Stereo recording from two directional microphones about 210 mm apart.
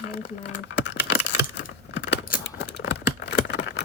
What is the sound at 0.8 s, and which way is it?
Computer keyboard, 55° left (ahead or behind).